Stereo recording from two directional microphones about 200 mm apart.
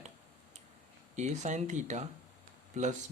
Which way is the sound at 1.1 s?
35° right (ahead or behind).